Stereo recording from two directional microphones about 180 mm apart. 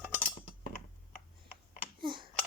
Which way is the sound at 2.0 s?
25° right (ahead or behind).